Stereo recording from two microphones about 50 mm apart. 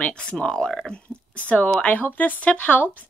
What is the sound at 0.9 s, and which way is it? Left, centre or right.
Speech, left.